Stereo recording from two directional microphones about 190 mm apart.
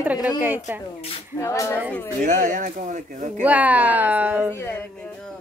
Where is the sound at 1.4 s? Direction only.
15° left (ahead or behind).